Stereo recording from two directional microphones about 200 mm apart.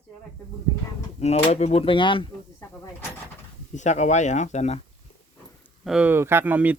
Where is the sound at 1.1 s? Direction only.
30° left (ahead or behind).